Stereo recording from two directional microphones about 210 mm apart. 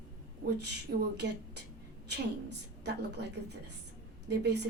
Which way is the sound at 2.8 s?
50° right (ahead or behind).